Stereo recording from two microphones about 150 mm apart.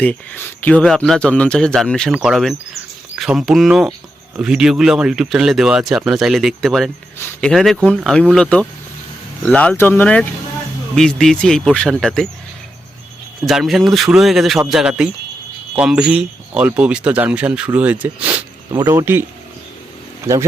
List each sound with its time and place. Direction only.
0.0 s speech: 10° left (ahead or behind)
13.4 s speech: centre (ahead or behind)